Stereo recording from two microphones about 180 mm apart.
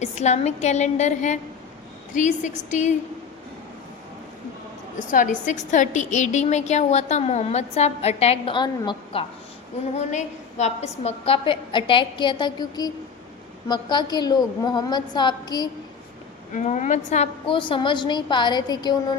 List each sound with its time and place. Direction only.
0.0 s a woman's voice: 40° left (ahead or behind)
4.9 s a woman's voice: 45° left (ahead or behind); by 9.2 s 25° left (ahead or behind)
9.9 s a woman's voice: 40° left (ahead or behind); by 15.7 s 20° left (ahead or behind)
16.5 s a woman's voice: 40° left (ahead or behind); by 18.9 s 25° left (ahead or behind)